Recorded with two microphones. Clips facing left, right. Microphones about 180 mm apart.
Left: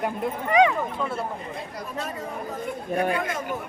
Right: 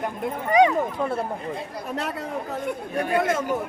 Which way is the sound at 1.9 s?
75° right (ahead or behind).